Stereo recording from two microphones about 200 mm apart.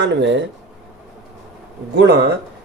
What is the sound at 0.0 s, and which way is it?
Speech, 65° right (ahead or behind).